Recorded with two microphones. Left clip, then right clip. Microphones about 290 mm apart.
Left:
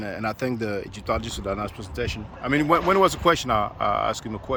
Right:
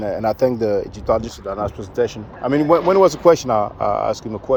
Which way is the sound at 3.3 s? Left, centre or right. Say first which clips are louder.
Right 7 dB; centre.